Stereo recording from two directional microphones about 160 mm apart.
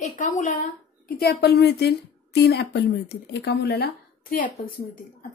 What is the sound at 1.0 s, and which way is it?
A woman's voice, 75° left (ahead or behind).